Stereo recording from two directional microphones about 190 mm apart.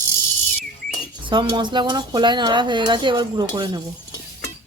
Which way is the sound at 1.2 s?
25° right (ahead or behind).